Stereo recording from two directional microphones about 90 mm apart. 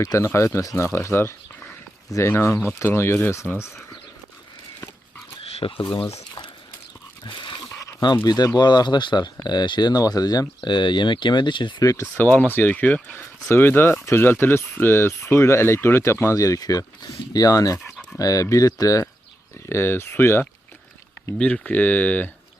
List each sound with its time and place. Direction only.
0.0 s speech: 35° left (ahead or behind)
5.4 s a sound: 80° left
7.3 s dog: 60° left (ahead or behind)
7.8 s a sound: 35° left (ahead or behind)
8.0 s speech: 50° left (ahead or behind)
10.6 s speech: 55° left (ahead or behind)
11.8 s speech: 40° left (ahead or behind)
12.1 s speech: 20° left (ahead or behind)
21.3 s speech: 15° left (ahead or behind)